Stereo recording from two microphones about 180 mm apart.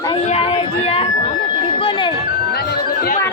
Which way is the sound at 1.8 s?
25° left (ahead or behind).